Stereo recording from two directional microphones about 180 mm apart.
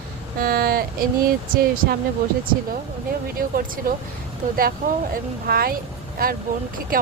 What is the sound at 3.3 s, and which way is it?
Speech, 55° right (ahead or behind).